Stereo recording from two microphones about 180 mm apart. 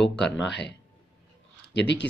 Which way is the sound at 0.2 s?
75° left (ahead or behind).